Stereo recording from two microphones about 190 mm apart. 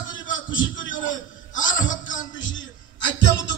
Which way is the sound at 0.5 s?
85° left.